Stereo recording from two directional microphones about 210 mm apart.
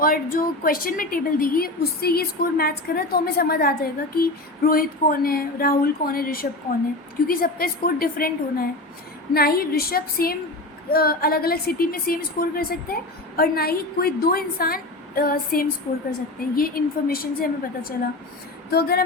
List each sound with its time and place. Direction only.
0.0 s a woman's voice: 45° left (ahead or behind)